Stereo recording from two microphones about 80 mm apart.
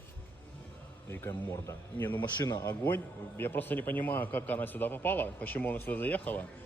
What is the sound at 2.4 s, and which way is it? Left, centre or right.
Speech, left.